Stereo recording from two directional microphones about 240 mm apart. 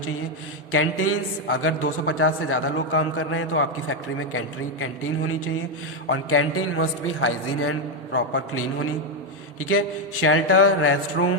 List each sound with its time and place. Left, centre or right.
0.7 s a man's voice: left